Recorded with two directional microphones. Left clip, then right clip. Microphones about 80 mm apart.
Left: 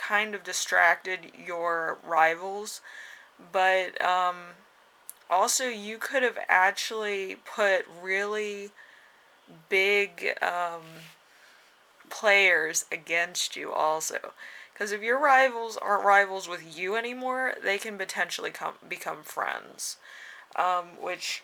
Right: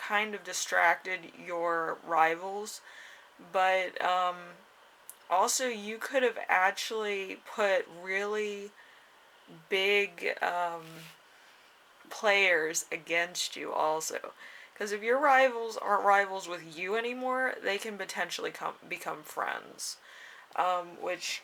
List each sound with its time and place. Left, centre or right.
0.0 s speech: left
12.0 s speech: left